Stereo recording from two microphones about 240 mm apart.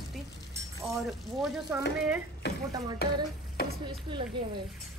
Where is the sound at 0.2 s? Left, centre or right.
Centre.